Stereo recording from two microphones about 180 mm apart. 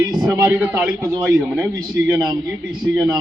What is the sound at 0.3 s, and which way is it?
A man's voice, 15° right (ahead or behind).